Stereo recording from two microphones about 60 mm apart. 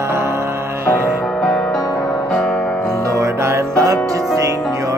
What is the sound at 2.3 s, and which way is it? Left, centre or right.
Music, centre.